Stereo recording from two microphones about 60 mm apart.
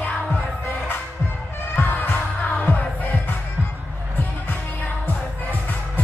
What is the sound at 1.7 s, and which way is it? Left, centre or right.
Music, left.